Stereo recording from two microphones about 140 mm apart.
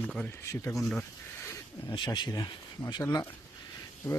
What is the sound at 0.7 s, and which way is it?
Speech, centre (ahead or behind).